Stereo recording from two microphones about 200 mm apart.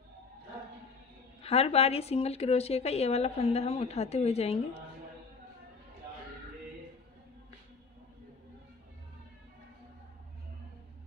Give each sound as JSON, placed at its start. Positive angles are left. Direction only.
{"t": 1.4, "sound": "a woman's voice", "side_deg": 30}